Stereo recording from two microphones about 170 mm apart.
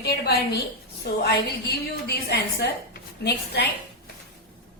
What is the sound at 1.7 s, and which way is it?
A woman's voice, 70° left (ahead or behind).